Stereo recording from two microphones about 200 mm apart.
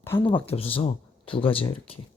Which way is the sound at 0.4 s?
30° left (ahead or behind).